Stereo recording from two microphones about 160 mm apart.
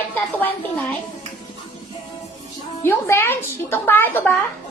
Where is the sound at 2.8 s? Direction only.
15° left (ahead or behind).